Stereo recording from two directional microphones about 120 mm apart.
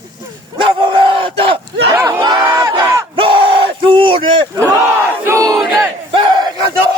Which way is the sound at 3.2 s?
50° right (ahead or behind).